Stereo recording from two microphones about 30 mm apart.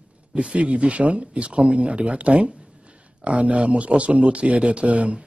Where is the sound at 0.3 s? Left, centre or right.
Right.